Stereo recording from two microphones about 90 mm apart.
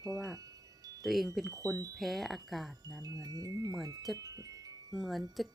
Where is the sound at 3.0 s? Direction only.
40° right (ahead or behind).